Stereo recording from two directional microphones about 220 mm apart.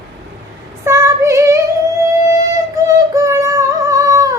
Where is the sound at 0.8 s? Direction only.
15° right (ahead or behind).